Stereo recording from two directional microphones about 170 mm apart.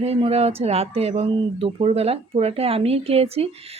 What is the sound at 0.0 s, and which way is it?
Speech, 35° right (ahead or behind).